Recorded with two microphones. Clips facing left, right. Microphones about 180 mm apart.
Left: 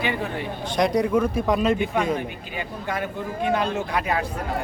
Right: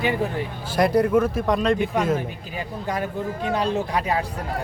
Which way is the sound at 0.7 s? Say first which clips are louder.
Right 2 dB; 5° right (ahead or behind).